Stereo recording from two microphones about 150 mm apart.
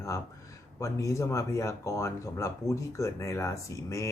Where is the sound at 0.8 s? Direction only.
20° left (ahead or behind).